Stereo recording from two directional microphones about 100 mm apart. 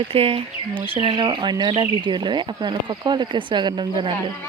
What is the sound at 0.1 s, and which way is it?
Speech, 70° right (ahead or behind).